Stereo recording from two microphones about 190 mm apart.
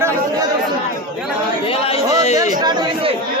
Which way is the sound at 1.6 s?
30° left (ahead or behind).